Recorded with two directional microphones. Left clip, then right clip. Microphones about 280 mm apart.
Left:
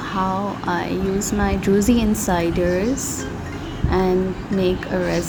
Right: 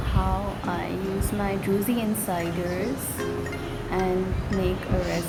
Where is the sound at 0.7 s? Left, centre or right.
Centre.